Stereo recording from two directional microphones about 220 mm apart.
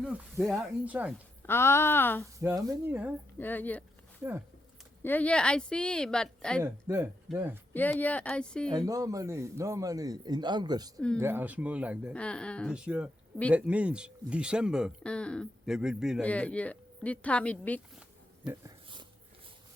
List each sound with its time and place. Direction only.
0.0 s speech: 5° right (ahead or behind)
1.4 s speech: 10° left (ahead or behind)
2.4 s a man's voice: 15° right (ahead or behind)
3.3 s speech: 10° left (ahead or behind)
4.2 s speech: 10° right (ahead or behind)
5.0 s speech: 5° left (ahead or behind)
6.6 s a man's voice: 10° right (ahead or behind)
7.7 s speech: 10° left (ahead or behind)
8.9 s a man's voice: 15° right (ahead or behind)
12.1 s speech: 5° left (ahead or behind)
18.6 s a sound: 20° right (ahead or behind)